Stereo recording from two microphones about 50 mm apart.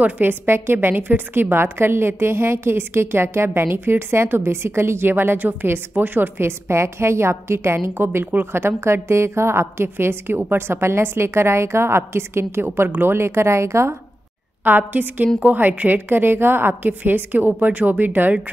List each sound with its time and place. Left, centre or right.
0.2 s a woman's voice: right
6.7 s a woman's voice: right
14.6 s a woman's voice: right
16.1 s a woman's voice: right